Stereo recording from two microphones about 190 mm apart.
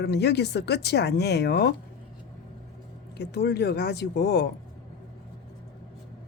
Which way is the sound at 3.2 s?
60° left (ahead or behind).